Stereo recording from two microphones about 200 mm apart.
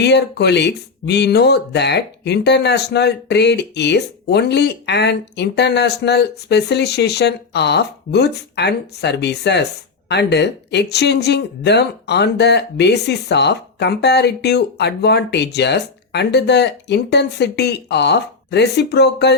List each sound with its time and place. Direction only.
0.0 s speech: 60° left (ahead or behind)